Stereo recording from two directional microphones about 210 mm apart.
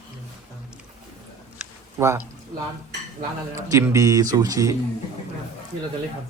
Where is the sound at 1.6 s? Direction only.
10° right (ahead or behind).